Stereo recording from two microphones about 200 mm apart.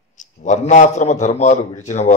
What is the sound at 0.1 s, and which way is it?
Speech, 40° left (ahead or behind).